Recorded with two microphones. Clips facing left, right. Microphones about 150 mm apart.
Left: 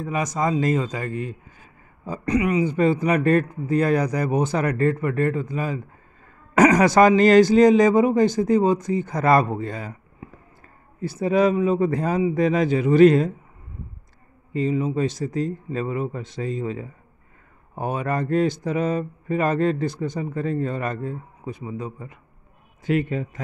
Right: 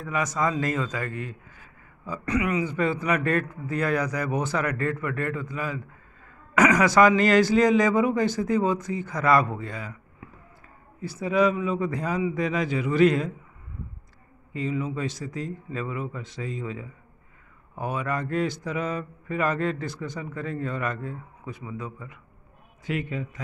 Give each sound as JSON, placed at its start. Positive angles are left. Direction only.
{"t": 0.0, "sound": "a man's voice", "side_deg": 20}
{"t": 3.9, "sound": "speech", "side_deg": 40}
{"t": 4.2, "sound": "speech", "side_deg": 20}
{"t": 4.6, "sound": "speech", "side_deg": 35}
{"t": 6.5, "sound": "a sound", "side_deg": 40}
{"t": 7.0, "sound": "speech", "side_deg": 30}
{"t": 9.1, "sound": "a man's voice", "side_deg": 45}
{"t": 9.6, "sound": "a sound", "side_deg": 40}
{"t": 11.1, "sound": "a man's voice", "side_deg": 45}
{"t": 14.5, "sound": "speech", "side_deg": 35}
{"t": 21.9, "sound": "a man's voice", "side_deg": 35}